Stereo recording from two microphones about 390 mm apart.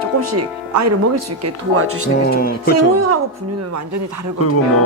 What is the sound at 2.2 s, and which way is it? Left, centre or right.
Music, left.